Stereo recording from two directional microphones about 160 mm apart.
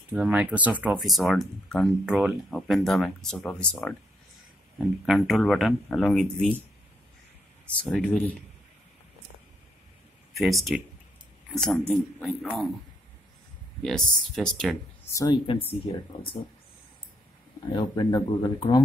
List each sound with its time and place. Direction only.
0.1 s speech: 5° right (ahead or behind)
7.6 s speech: 5° left (ahead or behind)
10.3 s speech: centre (ahead or behind)
13.8 s speech: 5° left (ahead or behind)
15.0 s speech: 25° left (ahead or behind)
17.7 s speech: 25° left (ahead or behind)